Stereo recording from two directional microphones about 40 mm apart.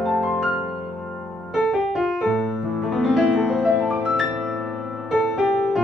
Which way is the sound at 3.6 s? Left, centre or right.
Centre.